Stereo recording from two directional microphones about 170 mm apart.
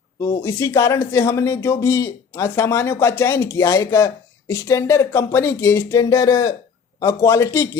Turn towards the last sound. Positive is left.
turn(degrees=15)  # may be behind; listen again after turning